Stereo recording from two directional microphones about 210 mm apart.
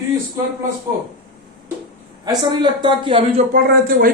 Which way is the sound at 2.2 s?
20° right (ahead or behind).